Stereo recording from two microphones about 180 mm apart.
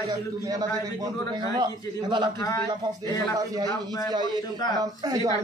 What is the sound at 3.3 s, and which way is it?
A man's voice, 20° right (ahead or behind).